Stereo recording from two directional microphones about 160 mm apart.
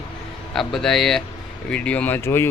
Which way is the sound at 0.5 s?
Centre (ahead or behind).